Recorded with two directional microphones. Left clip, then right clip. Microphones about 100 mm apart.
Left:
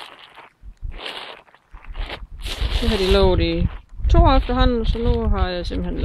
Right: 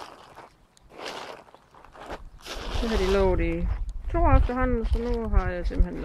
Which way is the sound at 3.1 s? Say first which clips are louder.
Left 7 dB; 25° left (ahead or behind).